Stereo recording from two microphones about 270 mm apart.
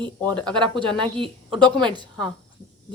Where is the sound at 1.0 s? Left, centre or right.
Centre.